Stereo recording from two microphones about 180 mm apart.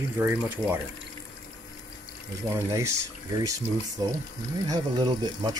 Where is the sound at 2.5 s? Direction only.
15° right (ahead or behind).